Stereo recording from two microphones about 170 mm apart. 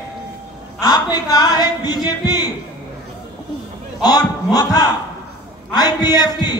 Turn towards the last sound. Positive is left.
turn(degrees=25)  # may be behind; listen again after turning